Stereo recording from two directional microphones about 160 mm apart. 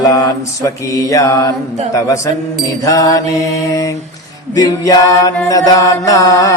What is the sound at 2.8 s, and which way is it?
Mantra, 20° left (ahead or behind).